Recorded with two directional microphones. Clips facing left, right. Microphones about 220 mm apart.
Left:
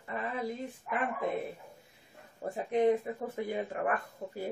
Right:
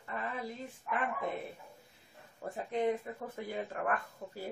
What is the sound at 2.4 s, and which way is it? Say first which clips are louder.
Speech: left 5 dB; 15° left (ahead or behind).